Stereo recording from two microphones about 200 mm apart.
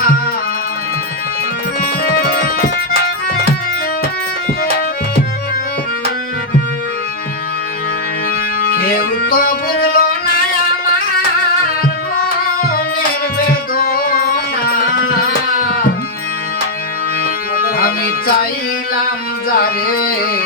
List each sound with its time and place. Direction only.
2.1 s music: 45° left (ahead or behind)
8.7 s music: 45° left (ahead or behind)
12.7 s music: 45° left (ahead or behind)
17.6 s music: 45° left (ahead or behind)
19.5 s a sound: 45° left (ahead or behind)